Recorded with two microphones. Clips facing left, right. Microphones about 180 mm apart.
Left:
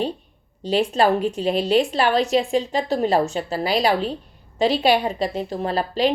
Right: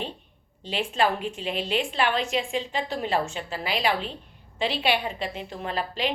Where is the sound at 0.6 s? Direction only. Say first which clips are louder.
Left 7 dB; 40° left (ahead or behind).